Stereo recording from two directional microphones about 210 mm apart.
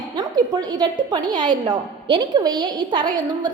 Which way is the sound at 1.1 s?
20° right (ahead or behind).